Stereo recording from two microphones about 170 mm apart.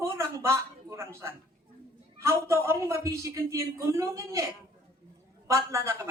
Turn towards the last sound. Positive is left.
turn(degrees=-15)  # may be behind; listen again after turning